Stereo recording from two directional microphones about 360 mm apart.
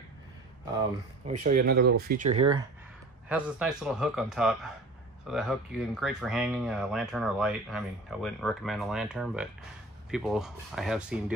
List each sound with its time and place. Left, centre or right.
1.4 s speech: right
3.3 s speech: centre